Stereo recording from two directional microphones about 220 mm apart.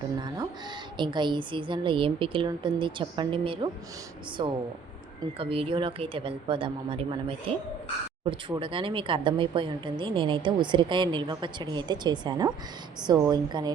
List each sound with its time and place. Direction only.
0.9 s a woman's voice: 20° right (ahead or behind)